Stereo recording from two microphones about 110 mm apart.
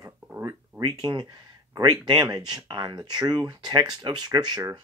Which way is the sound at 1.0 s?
40° right (ahead or behind).